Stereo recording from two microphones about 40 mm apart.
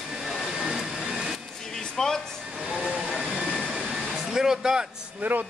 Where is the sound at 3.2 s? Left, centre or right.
Centre.